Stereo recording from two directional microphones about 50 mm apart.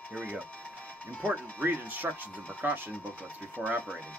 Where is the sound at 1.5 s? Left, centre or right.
Right.